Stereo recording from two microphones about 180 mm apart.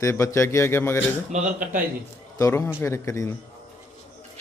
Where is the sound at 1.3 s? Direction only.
45° right (ahead or behind).